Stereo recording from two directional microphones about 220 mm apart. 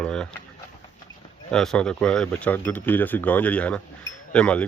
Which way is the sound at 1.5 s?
5° left (ahead or behind).